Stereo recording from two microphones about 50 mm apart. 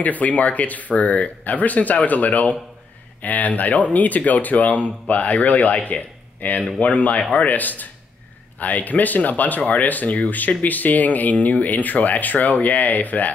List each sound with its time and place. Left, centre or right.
0.0 s speech: left